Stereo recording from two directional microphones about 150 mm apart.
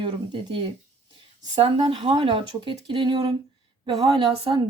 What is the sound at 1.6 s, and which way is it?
Speech, 35° right (ahead or behind).